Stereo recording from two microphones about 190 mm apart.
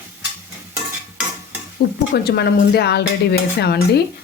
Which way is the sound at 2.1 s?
60° left (ahead or behind).